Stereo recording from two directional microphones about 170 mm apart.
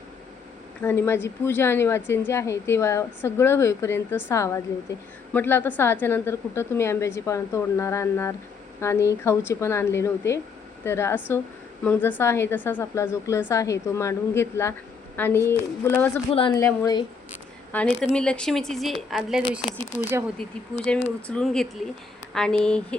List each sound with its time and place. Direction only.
0.8 s a woman's voice: 15° left (ahead or behind)
16.3 s a woman's voice: 30° left (ahead or behind)
16.6 s a woman's voice: 20° left (ahead or behind); by 19.4 s centre (ahead or behind)
20.0 s speech: 15° right (ahead or behind)
21.2 s a woman's voice: 5° left (ahead or behind)